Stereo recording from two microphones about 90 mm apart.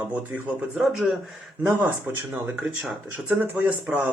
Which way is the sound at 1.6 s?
20° right (ahead or behind).